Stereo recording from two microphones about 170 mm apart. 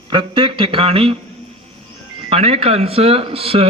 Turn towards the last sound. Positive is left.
turn(degrees=-35)  # may be behind; listen again after turning